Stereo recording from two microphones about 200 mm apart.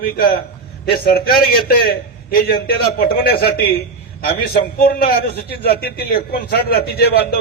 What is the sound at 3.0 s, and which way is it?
A man's voice, 50° left (ahead or behind).